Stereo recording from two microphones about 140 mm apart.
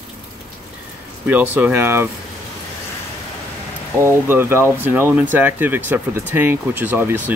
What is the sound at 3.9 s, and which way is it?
Speech, 20° right (ahead or behind).